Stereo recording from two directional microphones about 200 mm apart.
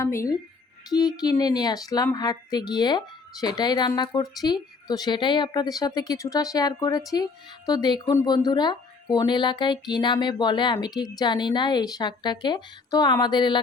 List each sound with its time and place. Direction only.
0.0 s speech: 15° left (ahead or behind)